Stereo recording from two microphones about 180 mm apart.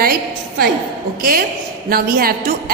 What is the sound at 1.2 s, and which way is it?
A woman's voice, 50° right (ahead or behind).